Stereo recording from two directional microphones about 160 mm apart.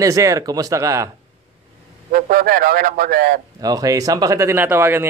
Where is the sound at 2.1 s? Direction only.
65° right (ahead or behind).